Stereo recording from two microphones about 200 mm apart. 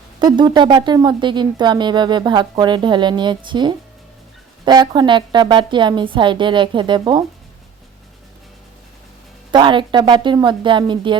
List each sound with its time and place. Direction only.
0.2 s speech: 20° right (ahead or behind)
9.5 s speech: 25° right (ahead or behind)